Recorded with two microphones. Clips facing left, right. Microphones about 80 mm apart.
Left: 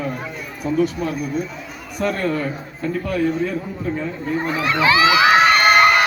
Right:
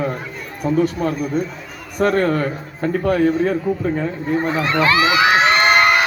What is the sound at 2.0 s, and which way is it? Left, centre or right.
Speech, right.